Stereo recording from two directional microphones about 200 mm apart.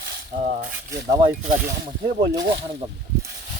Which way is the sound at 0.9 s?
15° right (ahead or behind).